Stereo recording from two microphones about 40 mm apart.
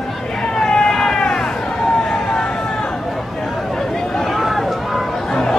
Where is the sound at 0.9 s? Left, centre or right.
Centre.